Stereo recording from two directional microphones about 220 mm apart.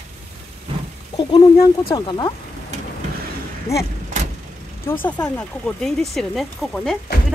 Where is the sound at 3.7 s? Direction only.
25° left (ahead or behind).